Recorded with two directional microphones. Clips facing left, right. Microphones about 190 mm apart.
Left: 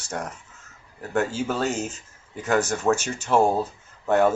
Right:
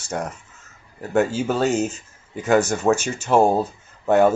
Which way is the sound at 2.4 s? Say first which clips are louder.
Right 4 dB; 10° right (ahead or behind).